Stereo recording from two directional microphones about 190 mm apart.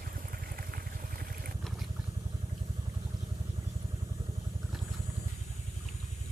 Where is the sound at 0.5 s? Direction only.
50° right (ahead or behind).